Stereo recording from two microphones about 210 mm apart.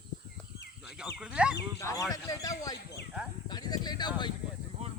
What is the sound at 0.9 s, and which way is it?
Speech, 5° right (ahead or behind).